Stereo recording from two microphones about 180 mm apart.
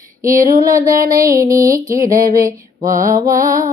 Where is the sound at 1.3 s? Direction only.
20° right (ahead or behind).